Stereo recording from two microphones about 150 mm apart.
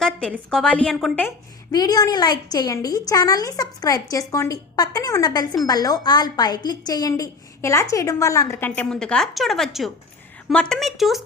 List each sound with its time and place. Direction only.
0.0 s a woman's voice: 5° left (ahead or behind)
1.7 s a woman's voice: 25° left (ahead or behind); by 11.2 s centre (ahead or behind)